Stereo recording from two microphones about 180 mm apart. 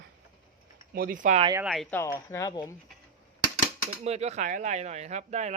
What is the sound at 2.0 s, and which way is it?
Speech, 15° left (ahead or behind).